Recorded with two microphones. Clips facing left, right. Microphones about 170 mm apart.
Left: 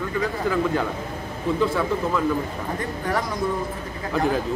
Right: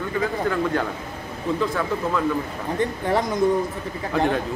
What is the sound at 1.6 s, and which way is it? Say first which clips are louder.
Speech: left 3 dB; centre (ahead or behind).